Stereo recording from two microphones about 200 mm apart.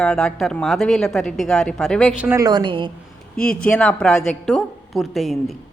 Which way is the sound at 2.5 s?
20° right (ahead or behind).